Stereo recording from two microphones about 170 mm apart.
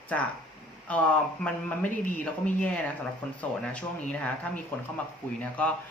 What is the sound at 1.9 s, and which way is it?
Speech, 50° left (ahead or behind).